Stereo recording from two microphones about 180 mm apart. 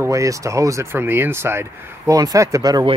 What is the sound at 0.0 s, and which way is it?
Speech, 15° right (ahead or behind).